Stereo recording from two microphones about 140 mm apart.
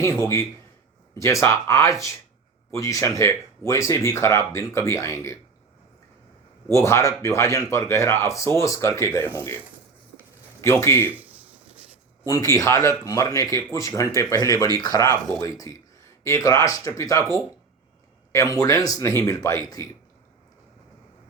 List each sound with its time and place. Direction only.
0.0 s speech: 20° left (ahead or behind)
6.7 s speech: 20° left (ahead or behind)
10.6 s speech: 20° left (ahead or behind)
11.1 s a sound: 10° right (ahead or behind)
12.3 s speech: 25° left (ahead or behind)